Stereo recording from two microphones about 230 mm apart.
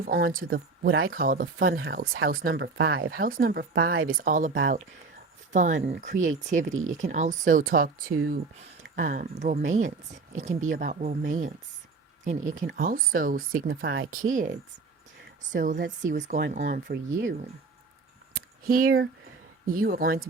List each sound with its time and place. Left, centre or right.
0.0 s speech: right
15.6 s speech: right
19.6 s speech: right